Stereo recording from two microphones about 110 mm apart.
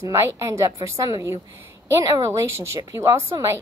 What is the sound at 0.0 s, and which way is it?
A woman's voice, 25° right (ahead or behind).